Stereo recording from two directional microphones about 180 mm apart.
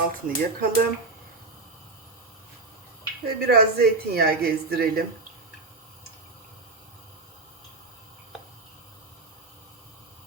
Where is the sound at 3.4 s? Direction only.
60° right (ahead or behind).